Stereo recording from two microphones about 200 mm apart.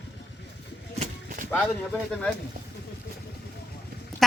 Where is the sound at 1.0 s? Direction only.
40° right (ahead or behind).